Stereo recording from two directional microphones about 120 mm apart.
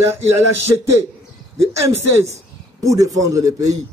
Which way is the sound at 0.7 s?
25° right (ahead or behind).